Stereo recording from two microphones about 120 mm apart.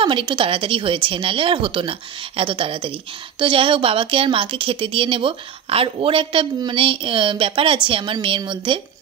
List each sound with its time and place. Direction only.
0.0 s a woman's voice: 45° right (ahead or behind)